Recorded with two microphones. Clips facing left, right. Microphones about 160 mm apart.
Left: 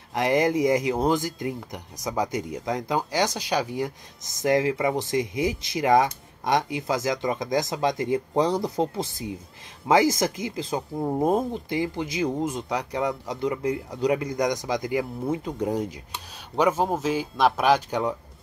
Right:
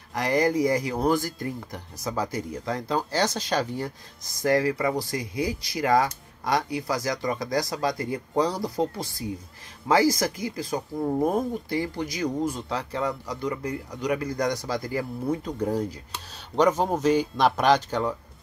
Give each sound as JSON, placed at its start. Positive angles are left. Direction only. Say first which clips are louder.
{"t": 0.1, "sound": "speech", "louder": "left 1 dB", "side_deg": 20}
{"t": 16.5, "sound": "speech", "louder": "right 1 dB", "side_deg": 5}